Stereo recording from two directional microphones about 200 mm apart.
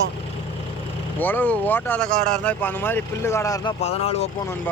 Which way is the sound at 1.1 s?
10° left (ahead or behind).